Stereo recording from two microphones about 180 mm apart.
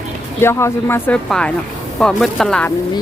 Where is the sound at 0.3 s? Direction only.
15° left (ahead or behind).